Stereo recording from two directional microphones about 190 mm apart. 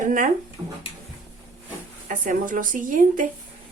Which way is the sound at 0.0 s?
40° right (ahead or behind).